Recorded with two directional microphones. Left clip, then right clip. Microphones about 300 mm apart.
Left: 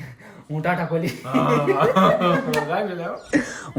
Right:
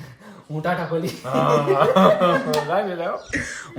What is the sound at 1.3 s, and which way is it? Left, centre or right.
Speech, centre.